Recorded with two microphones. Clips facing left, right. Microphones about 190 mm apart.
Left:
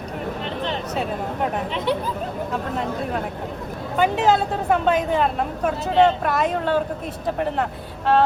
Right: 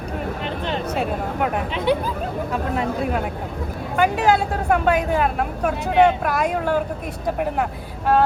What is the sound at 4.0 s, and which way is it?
Speech, 10° right (ahead or behind).